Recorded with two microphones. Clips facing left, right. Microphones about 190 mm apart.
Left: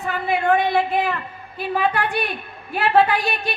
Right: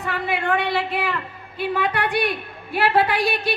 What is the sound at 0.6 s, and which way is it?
A woman's voice, 70° right (ahead or behind).